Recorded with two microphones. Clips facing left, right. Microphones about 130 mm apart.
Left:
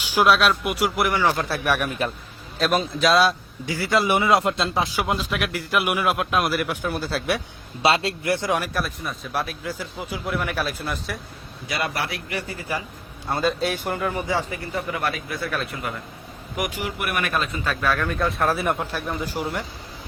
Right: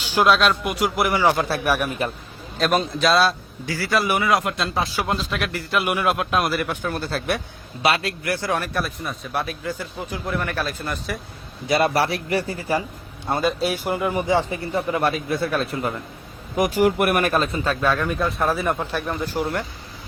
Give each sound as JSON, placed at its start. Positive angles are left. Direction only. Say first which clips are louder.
{"t": 0.0, "sound": "a man's voice", "louder": "right 1 dB", "side_deg": 10}
{"t": 7.8, "sound": "a man's voice", "louder": "left 1 dB", "side_deg": 25}
{"t": 8.7, "sound": "a man's voice", "louder": "right 1 dB", "side_deg": 0}
{"t": 11.7, "sound": "speech", "louder": "right 8 dB", "side_deg": -35}
{"t": 13.2, "sound": "a man's voice", "louder": "right 2 dB", "side_deg": -20}
{"t": 13.6, "sound": "speech", "louder": "right 2 dB", "side_deg": -5}
{"t": 16.8, "sound": "speech", "louder": "right 9 dB", "side_deg": -45}
{"t": 18.2, "sound": "a man's voice", "louder": "even", "side_deg": 0}